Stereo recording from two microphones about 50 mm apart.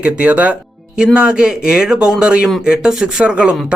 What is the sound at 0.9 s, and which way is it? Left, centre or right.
Speech, centre.